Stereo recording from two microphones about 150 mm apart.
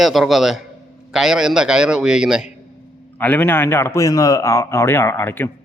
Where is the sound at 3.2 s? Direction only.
10° left (ahead or behind).